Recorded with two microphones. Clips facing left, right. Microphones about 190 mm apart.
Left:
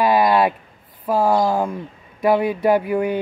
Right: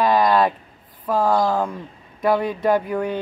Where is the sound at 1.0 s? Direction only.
10° left (ahead or behind).